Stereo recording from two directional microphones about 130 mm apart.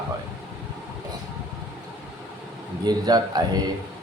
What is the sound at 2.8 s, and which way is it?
Speech, 30° right (ahead or behind).